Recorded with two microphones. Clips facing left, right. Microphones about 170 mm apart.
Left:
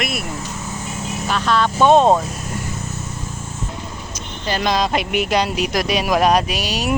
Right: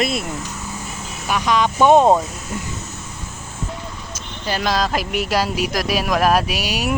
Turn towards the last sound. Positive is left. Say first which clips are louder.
# even
turn(degrees=-10)  # may be behind; listen again after turning